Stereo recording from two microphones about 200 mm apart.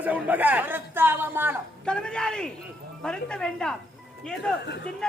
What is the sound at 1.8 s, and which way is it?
A man's voice, 5° left (ahead or behind).